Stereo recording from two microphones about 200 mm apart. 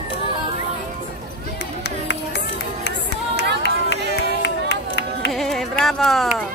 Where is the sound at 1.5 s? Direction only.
55° left (ahead or behind).